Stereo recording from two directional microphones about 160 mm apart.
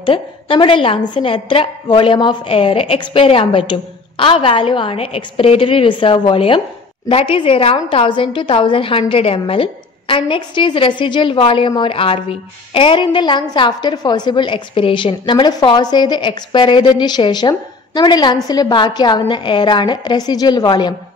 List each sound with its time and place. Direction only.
0.0 s a woman's voice: 30° left (ahead or behind)